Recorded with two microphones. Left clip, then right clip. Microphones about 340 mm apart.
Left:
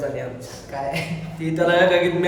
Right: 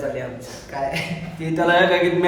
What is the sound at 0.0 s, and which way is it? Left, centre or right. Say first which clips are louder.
Speech: even; centre.